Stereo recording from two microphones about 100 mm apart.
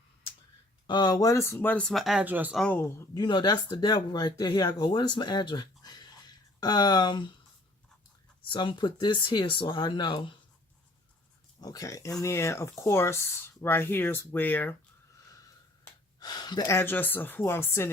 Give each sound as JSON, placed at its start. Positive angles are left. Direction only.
{"t": 0.9, "sound": "speech", "side_deg": 45}
{"t": 1.5, "sound": "speech", "side_deg": 15}
{"t": 1.8, "sound": "speech", "side_deg": 0}
{"t": 2.2, "sound": "speech", "side_deg": -15}
{"t": 3.2, "sound": "speech", "side_deg": 45}
{"t": 8.4, "sound": "speech", "side_deg": 50}
{"t": 11.6, "sound": "speech", "side_deg": 35}
{"t": 16.2, "sound": "speech", "side_deg": 45}
{"t": 16.6, "sound": "speech", "side_deg": 25}